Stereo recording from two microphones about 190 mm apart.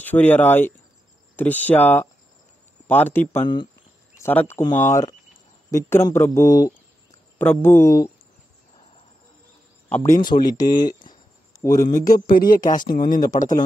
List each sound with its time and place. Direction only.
0.0 s a man's voice: 10° left (ahead or behind)
9.8 s speech: 10° left (ahead or behind)
10.6 s speech: 20° left (ahead or behind)
12.1 s speech: 45° left (ahead or behind)